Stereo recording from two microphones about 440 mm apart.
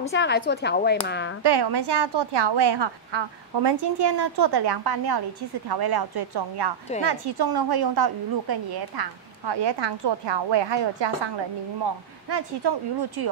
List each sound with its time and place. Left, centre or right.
0.0 s speech: left
1.4 s a woman's voice: right